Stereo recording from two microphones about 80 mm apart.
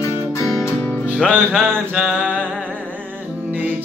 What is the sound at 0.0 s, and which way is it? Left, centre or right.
Music, left.